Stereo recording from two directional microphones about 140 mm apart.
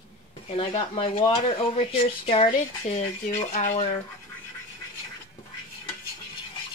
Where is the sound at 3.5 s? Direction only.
55° left (ahead or behind).